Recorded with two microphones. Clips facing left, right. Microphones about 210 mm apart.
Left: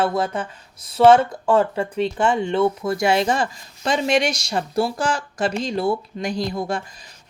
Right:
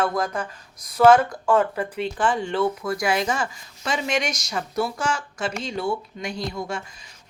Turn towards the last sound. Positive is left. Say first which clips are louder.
# left 5 dB
turn(degrees=35)  # may be behind; listen again after turning